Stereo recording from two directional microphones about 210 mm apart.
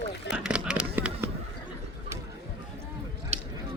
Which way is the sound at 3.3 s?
30° right (ahead or behind).